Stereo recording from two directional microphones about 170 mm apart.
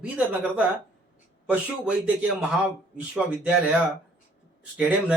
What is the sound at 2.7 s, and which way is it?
Speech, 5° right (ahead or behind).